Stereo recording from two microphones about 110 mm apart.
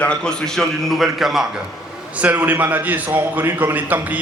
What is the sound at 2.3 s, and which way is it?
A man's voice, 20° right (ahead or behind).